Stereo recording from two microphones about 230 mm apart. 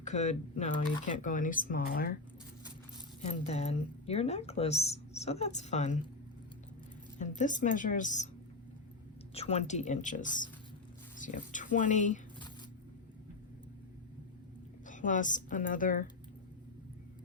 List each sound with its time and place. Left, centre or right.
0.0 s speech: left
3.2 s speech: left
7.2 s speech: left
9.3 s speech: left
14.8 s speech: left